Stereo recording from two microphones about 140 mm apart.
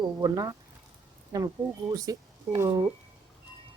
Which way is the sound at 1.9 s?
25° right (ahead or behind).